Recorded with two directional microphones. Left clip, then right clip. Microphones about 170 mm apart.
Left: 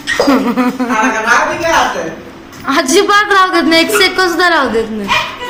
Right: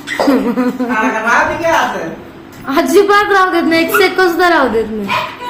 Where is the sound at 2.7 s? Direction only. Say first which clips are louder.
Even; centre (ahead or behind).